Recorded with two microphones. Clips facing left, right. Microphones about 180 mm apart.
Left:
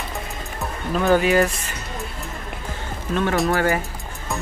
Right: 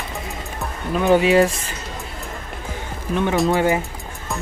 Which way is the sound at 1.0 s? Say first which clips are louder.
Right 3 dB; 20° right (ahead or behind).